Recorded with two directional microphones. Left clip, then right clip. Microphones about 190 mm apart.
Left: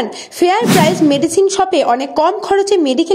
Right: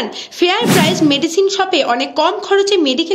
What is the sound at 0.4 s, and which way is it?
A woman's voice, 30° left (ahead or behind).